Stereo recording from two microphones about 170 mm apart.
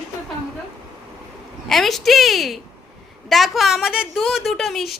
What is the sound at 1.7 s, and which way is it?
A woman's voice, centre (ahead or behind).